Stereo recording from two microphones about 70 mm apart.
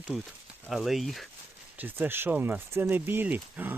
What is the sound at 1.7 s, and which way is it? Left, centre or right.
Speech, right.